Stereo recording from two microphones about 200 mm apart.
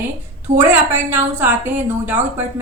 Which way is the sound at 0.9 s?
10° right (ahead or behind).